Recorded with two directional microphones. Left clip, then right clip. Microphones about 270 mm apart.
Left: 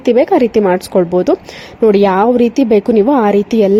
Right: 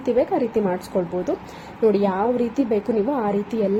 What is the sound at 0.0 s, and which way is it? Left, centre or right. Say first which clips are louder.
A woman's voice: left 10 dB; left.